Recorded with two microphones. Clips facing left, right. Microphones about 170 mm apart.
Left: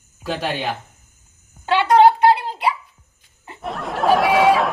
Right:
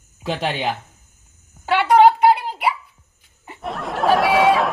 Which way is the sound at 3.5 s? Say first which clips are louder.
Even; centre (ahead or behind).